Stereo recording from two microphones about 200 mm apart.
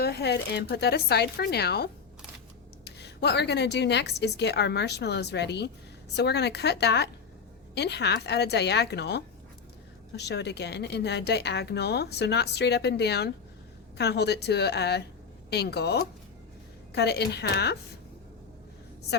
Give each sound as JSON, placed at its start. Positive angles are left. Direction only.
{"t": 0.0, "sound": "a woman's voice", "side_deg": 55}